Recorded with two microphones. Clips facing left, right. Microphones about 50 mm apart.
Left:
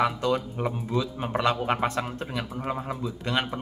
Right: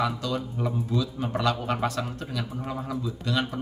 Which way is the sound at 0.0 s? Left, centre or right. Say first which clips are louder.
Left 3 dB; left.